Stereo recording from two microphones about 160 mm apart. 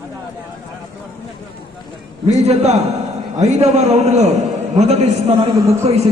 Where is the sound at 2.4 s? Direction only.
40° right (ahead or behind).